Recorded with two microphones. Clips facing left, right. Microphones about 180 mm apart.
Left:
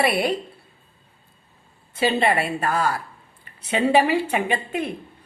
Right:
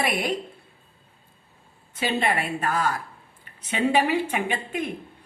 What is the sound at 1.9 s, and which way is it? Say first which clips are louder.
Speech: left 4 dB; 10° left (ahead or behind).